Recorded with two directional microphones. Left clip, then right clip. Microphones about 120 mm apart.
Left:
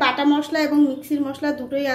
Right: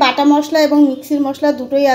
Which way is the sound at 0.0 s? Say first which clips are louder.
Right 7 dB; 45° right (ahead or behind).